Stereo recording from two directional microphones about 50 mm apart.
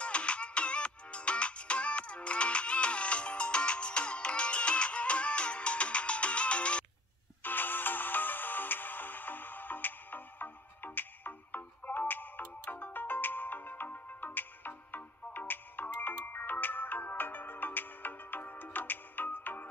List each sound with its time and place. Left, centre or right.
0.0 s music: left
7.4 s music: left